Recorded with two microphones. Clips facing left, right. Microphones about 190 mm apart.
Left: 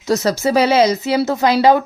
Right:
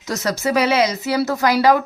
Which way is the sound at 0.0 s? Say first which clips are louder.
Left 5 dB; 30° left (ahead or behind).